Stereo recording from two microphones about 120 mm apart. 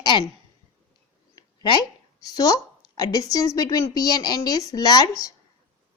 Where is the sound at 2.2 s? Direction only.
30° left (ahead or behind).